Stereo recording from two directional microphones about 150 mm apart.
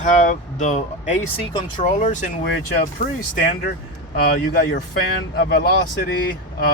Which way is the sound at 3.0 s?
60° left (ahead or behind).